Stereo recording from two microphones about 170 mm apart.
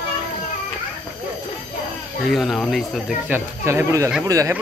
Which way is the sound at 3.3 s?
15° right (ahead or behind).